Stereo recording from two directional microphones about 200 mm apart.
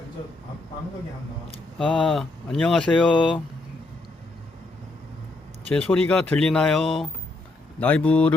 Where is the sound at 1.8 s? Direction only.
Centre (ahead or behind).